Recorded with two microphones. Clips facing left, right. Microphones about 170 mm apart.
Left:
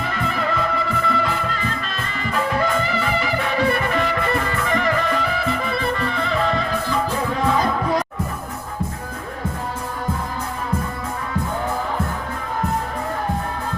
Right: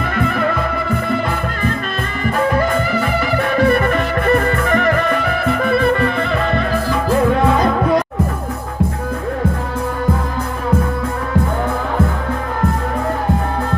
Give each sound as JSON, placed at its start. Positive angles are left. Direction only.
{"t": 0.0, "sound": "music", "side_deg": -55}